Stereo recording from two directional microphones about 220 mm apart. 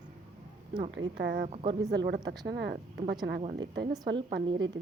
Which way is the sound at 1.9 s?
45° right (ahead or behind).